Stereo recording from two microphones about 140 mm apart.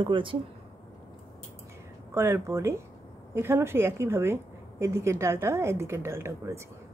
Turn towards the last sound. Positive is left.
turn(degrees=-20)  # may be behind; listen again after turning